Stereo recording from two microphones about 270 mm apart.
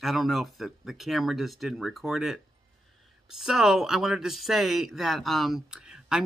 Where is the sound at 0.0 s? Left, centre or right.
Centre.